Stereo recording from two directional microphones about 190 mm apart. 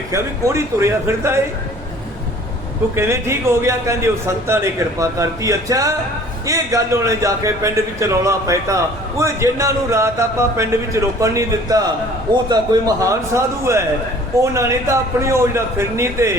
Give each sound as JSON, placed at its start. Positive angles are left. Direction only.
{"t": 0.1, "sound": "a man's voice", "side_deg": -15}
{"t": 2.9, "sound": "a man's voice", "side_deg": -15}